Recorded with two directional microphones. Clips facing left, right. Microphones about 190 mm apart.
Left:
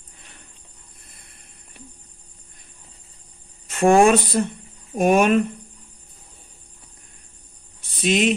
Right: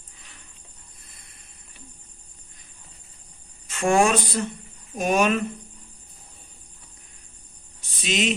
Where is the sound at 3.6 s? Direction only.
55° left (ahead or behind).